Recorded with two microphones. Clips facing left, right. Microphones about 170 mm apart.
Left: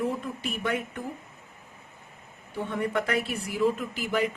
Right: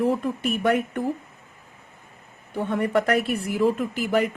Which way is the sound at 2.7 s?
55° right (ahead or behind).